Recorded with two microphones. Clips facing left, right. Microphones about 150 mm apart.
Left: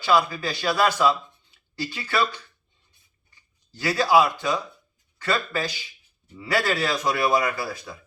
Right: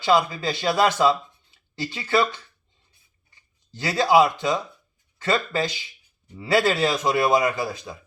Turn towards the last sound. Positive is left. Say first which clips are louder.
# right 3 dB
turn(degrees=-20)  # may be behind; listen again after turning